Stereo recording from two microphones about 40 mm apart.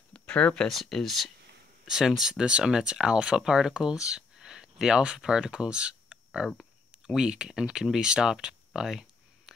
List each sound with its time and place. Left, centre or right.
0.1 s a sound: left
0.7 s speech: centre
1.9 s speech: centre